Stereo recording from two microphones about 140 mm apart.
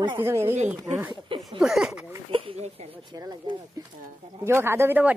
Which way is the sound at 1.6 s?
5° right (ahead or behind).